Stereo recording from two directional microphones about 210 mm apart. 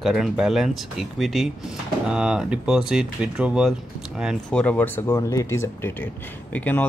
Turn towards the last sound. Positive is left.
turn(degrees=10)  # may be behind; listen again after turning